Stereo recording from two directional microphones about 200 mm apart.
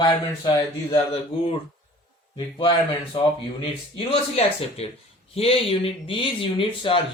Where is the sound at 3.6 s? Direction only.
25° left (ahead or behind).